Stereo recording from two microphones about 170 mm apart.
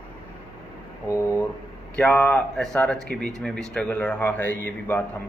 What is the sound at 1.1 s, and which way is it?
Speech, 15° left (ahead or behind).